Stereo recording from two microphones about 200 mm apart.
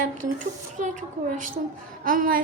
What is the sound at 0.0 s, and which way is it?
A woman's voice, 40° right (ahead or behind).